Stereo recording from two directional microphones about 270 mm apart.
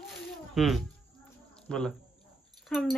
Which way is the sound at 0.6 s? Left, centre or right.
Centre.